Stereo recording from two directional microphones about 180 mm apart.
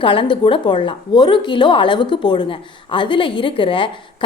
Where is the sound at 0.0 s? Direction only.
30° left (ahead or behind).